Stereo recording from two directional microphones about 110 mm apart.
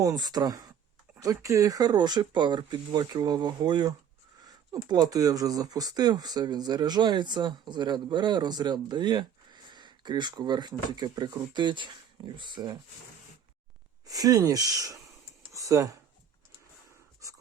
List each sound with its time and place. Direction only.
0.0 s speech: 35° right (ahead or behind)
14.1 s speech: 35° right (ahead or behind)
17.2 s dog: 30° right (ahead or behind)